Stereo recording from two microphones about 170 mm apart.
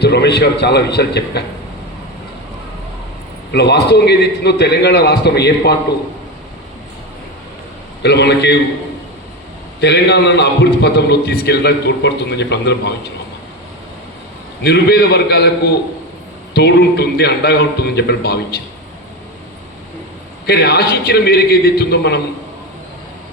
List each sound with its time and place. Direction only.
0.0 s a man's voice: 75° left (ahead or behind)
3.5 s a man's voice: 75° left (ahead or behind)
8.0 s a man's voice: 80° left
9.8 s a man's voice: 80° left
14.6 s a man's voice: 75° left (ahead or behind)
20.5 s a man's voice: 75° left (ahead or behind)